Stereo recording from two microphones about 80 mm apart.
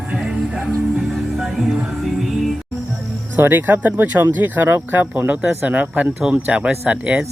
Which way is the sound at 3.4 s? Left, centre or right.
Right.